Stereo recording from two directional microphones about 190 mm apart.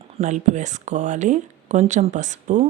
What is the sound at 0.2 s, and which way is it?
Speech, 40° right (ahead or behind).